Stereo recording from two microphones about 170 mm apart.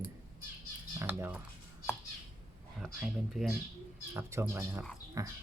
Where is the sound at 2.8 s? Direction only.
5° right (ahead or behind).